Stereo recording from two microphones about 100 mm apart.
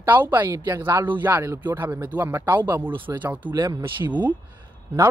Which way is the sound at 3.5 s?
40° right (ahead or behind).